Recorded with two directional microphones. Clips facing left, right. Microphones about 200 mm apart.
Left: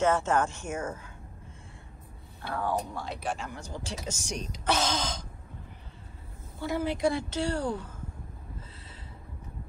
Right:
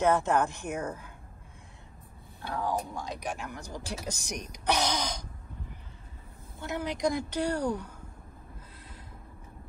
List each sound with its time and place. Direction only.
0.0 s speech: 15° right (ahead or behind)
2.4 s speech: 15° right (ahead or behind)
6.6 s speech: 20° right (ahead or behind)